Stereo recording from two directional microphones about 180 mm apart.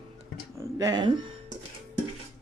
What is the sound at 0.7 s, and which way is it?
Speech, 20° right (ahead or behind).